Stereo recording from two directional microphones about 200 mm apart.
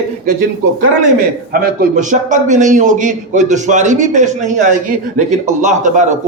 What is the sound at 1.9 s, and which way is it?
A man's voice, 40° right (ahead or behind).